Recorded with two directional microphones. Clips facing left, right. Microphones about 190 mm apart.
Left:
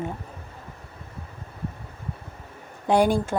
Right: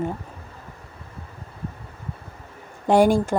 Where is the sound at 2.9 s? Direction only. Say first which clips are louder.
Right 3 dB; 45° right (ahead or behind).